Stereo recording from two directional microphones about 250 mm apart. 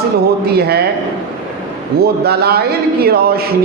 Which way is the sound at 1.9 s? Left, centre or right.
Right.